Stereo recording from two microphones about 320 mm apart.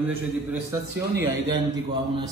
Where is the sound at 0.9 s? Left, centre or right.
Right.